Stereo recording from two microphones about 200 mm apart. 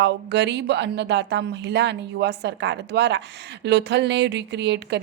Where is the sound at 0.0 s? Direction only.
60° right (ahead or behind).